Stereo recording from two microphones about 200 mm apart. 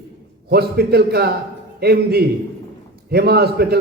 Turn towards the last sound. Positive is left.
turn(degrees=-55)  # may be behind; listen again after turning